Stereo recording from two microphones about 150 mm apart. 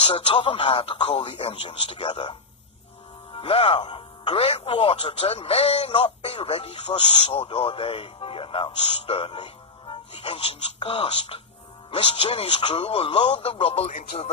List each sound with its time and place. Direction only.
0.0 s speech: 40° left (ahead or behind)
3.3 s speech: 35° left (ahead or behind)